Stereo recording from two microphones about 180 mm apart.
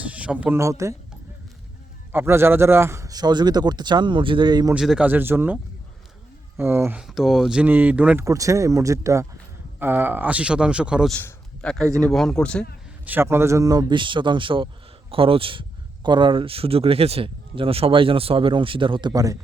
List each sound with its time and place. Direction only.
0.0 s speech: 5° right (ahead or behind)
2.1 s speech: 15° right (ahead or behind)
4.7 s speech: 5° right (ahead or behind)
6.6 s speech: 15° right (ahead or behind)
7.1 s speech: centre (ahead or behind)
11.2 s a sound: 10° left (ahead or behind)
11.9 s speech: 5° left (ahead or behind)
13.1 s speech: 10° right (ahead or behind)